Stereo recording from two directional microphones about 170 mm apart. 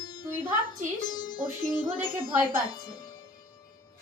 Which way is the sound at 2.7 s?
20° left (ahead or behind).